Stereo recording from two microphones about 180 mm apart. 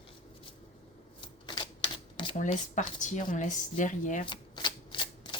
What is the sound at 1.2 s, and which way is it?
Typewriter, 25° left (ahead or behind).